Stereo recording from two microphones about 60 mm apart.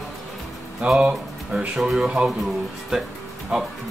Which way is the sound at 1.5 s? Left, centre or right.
Centre.